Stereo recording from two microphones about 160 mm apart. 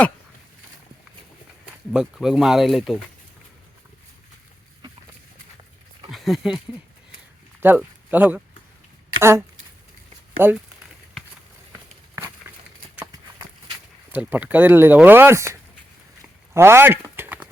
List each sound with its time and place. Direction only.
1.9 s speech: 5° right (ahead or behind)
6.1 s speech: centre (ahead or behind)
7.6 s speech: 10° right (ahead or behind)
10.4 s speech: 15° right (ahead or behind)
12.4 s a sound: 15° right (ahead or behind)
14.1 s speech: 10° right (ahead or behind)
16.6 s chopping: 15° right (ahead or behind)